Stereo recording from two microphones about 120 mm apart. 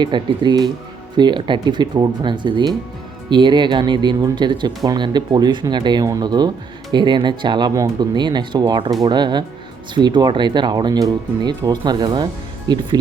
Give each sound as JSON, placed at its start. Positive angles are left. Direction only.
{"t": 0.0, "sound": "speech", "side_deg": -40}